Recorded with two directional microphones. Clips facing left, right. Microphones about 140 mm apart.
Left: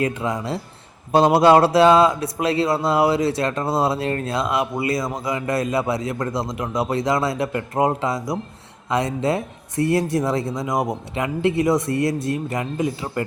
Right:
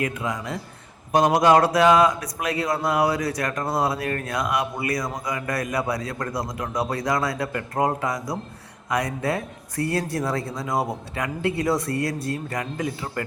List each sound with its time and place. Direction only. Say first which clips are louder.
0.0 s a man's voice: left 4 dB; 30° left (ahead or behind)